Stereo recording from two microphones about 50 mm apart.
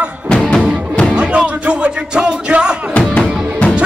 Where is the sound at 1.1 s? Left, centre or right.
Right.